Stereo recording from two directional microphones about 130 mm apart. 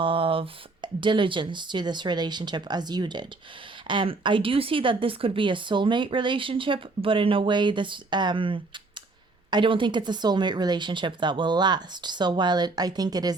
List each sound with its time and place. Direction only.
0.0 s speech: 45° right (ahead or behind)